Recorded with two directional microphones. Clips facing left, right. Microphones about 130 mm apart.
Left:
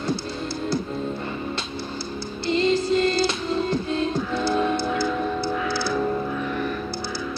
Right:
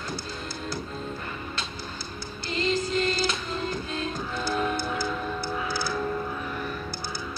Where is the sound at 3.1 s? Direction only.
25° left (ahead or behind).